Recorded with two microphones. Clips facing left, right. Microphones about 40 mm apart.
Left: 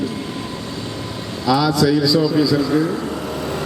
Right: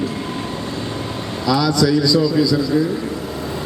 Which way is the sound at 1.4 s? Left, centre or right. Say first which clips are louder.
Left 1 dB; centre.